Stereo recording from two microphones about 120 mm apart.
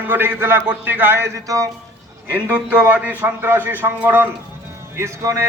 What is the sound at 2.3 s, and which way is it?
A man's voice, 10° right (ahead or behind).